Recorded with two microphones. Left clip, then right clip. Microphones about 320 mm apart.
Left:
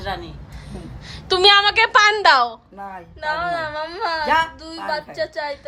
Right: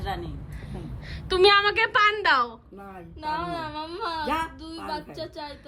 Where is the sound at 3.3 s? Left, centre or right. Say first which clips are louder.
Left 7 dB; left.